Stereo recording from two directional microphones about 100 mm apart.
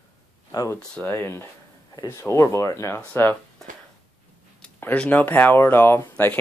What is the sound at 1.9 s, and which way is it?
Speech, 35° left (ahead or behind).